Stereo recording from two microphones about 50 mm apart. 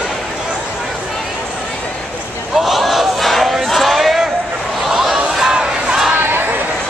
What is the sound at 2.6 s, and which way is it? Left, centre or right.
Battle cry, centre.